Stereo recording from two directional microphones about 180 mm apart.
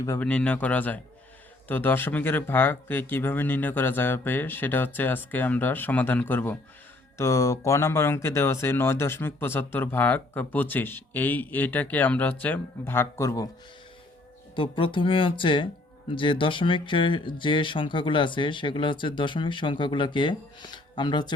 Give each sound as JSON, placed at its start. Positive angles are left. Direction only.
{"t": 0.0, "sound": "speech", "side_deg": 15}
{"t": 0.3, "sound": "speech", "side_deg": 5}
{"t": 14.5, "sound": "speech", "side_deg": 30}